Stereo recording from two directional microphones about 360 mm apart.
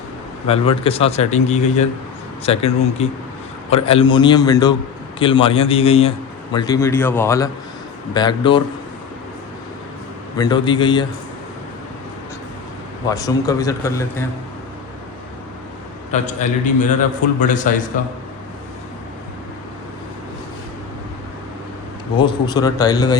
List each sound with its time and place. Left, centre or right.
0.4 s a man's voice: centre
10.3 s a man's voice: centre
13.1 s a man's voice: centre
16.1 s a man's voice: centre
22.2 s a man's voice: centre